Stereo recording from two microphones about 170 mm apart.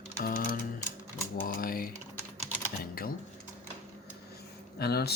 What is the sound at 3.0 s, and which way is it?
Speech, 60° left (ahead or behind).